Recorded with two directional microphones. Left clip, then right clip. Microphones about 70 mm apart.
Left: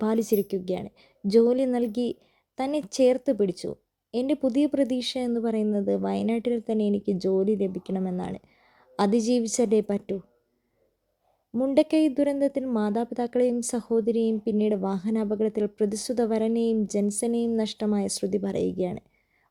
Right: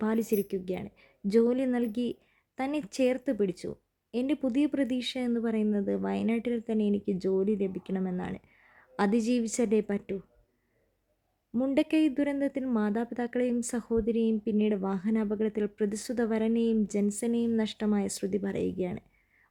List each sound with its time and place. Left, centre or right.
0.0 s speech: left
11.7 s speech: left